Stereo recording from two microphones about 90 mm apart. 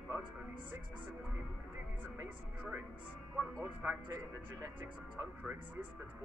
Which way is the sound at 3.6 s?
15° right (ahead or behind).